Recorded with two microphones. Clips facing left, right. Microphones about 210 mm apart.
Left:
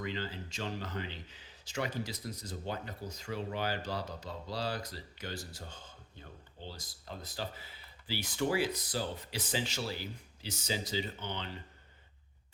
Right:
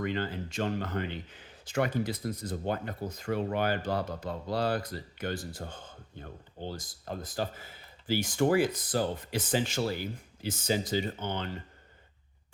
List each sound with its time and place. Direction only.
0.0 s speech: 55° right (ahead or behind)